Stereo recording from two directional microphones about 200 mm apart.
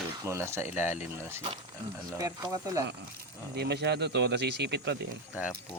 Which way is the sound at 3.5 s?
55° right (ahead or behind).